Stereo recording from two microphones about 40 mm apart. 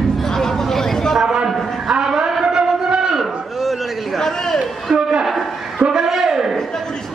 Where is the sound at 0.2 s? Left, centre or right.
Centre.